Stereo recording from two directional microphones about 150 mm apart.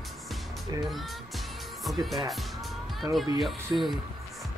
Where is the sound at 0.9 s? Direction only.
Centre (ahead or behind).